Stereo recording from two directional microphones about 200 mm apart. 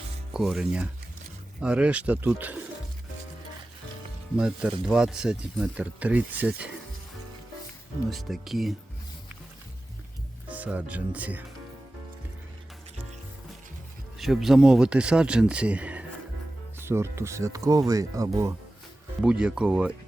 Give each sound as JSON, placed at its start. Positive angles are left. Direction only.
{"t": 0.3, "sound": "speech", "side_deg": 0}
{"t": 4.4, "sound": "speech", "side_deg": -5}
{"t": 8.1, "sound": "speech", "side_deg": 0}
{"t": 10.5, "sound": "speech", "side_deg": -5}
{"t": 14.2, "sound": "speech", "side_deg": 0}
{"t": 19.2, "sound": "speech", "side_deg": -5}